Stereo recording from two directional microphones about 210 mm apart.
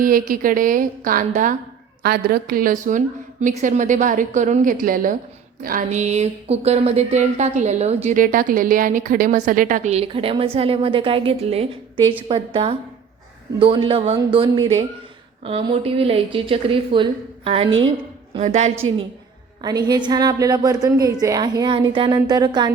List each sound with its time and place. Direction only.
0.0 s a woman's voice: 40° right (ahead or behind)
19.6 s a woman's voice: 20° right (ahead or behind)